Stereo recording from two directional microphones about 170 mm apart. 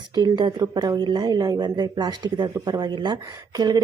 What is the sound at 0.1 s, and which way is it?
Speech, 25° right (ahead or behind).